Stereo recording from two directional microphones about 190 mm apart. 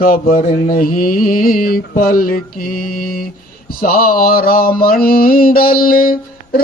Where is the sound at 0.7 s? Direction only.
50° left (ahead or behind).